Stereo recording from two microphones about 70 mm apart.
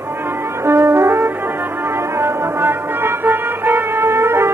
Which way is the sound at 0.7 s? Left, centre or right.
Right.